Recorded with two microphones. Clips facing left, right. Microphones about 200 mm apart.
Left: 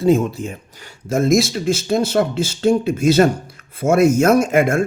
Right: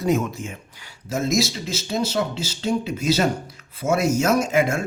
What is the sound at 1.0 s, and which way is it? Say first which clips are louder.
Speech: left 7 dB; 55° left (ahead or behind).